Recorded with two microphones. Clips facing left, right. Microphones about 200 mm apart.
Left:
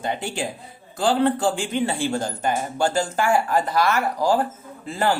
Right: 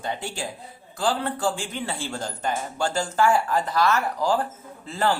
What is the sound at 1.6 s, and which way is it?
Speech, 15° left (ahead or behind).